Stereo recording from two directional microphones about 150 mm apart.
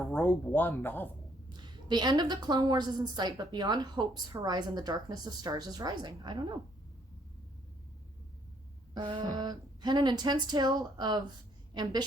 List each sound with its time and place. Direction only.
0.0 s speech: 10° left (ahead or behind)
1.5 s a woman's voice: 30° right (ahead or behind)
9.0 s a woman's voice: 30° right (ahead or behind)